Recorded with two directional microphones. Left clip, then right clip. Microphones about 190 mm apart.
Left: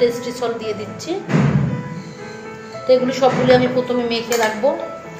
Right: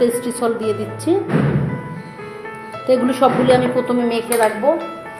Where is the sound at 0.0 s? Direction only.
55° right (ahead or behind).